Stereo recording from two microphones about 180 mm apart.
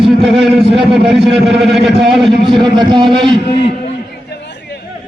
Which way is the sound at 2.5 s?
25° right (ahead or behind).